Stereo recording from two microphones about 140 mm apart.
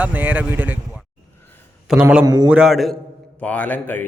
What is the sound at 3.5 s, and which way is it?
Speech, 10° left (ahead or behind).